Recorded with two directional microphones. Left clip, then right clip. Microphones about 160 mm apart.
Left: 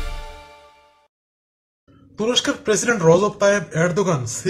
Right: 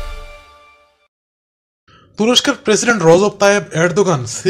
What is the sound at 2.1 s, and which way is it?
Speech, 25° right (ahead or behind).